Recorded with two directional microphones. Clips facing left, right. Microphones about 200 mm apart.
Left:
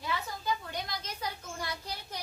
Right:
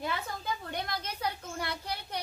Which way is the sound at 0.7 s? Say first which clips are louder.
Right 2 dB; 60° right (ahead or behind).